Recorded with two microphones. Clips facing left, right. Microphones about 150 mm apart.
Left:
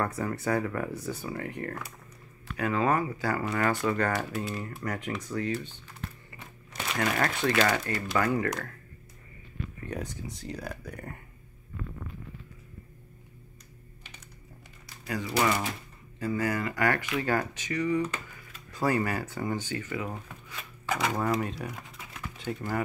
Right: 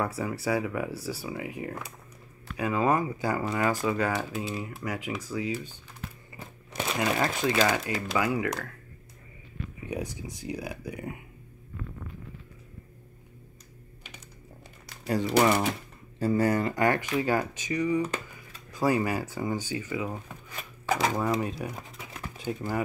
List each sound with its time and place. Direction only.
0.0 s speech: 5° right (ahead or behind)
6.7 s crumpling: 20° right (ahead or behind)
7.2 s speech: 10° right (ahead or behind)
9.8 s speech: 10° right (ahead or behind)
15.3 s speech: 20° right (ahead or behind)
20.9 s speech: 30° right (ahead or behind)
21.2 s speech: 15° right (ahead or behind)